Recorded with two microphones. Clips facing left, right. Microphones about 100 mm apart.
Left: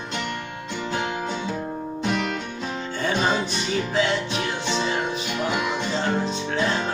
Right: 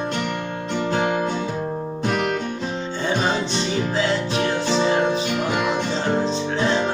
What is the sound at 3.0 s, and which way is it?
Music, 30° right (ahead or behind).